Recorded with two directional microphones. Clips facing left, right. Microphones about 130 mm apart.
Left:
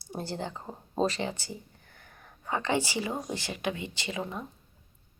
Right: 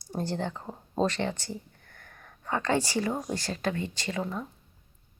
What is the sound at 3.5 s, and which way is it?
Speech, 15° left (ahead or behind).